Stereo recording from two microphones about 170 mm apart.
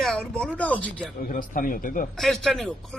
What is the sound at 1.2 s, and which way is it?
Speech, 55° left (ahead or behind).